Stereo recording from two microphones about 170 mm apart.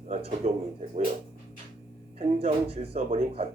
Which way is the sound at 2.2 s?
35° right (ahead or behind).